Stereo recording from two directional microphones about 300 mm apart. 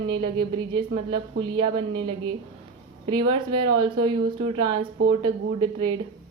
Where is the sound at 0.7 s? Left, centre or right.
Centre.